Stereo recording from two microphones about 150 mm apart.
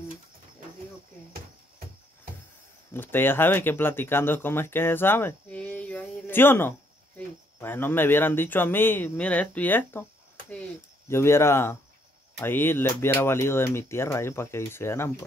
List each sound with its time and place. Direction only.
2.9 s speech: 15° left (ahead or behind)
11.1 s speech: 15° left (ahead or behind)